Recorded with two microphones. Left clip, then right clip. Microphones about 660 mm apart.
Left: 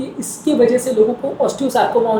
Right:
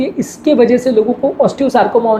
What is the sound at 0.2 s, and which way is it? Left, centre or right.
A woman's voice, right.